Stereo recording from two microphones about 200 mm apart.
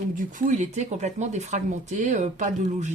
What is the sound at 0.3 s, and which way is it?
Speech, 40° right (ahead or behind).